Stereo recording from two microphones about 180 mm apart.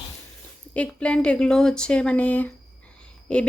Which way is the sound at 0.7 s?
5° left (ahead or behind).